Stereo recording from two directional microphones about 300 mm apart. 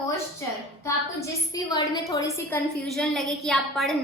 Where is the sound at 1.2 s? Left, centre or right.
Centre.